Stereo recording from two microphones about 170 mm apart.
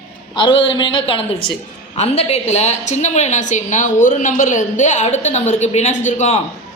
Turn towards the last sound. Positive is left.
turn(degrees=40)  # may be behind; listen again after turning